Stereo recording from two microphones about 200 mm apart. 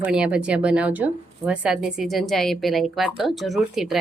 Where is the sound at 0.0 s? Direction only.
5° right (ahead or behind).